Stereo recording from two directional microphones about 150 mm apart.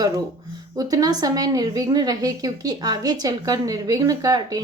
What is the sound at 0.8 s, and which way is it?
A woman's voice, 25° right (ahead or behind).